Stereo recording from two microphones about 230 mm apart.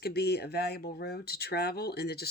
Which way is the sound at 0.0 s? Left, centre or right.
Left.